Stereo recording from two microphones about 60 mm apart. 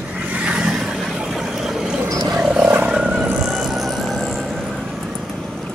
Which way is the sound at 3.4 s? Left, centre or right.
Centre.